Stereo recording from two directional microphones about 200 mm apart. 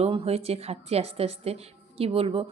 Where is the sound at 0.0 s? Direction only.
30° right (ahead or behind).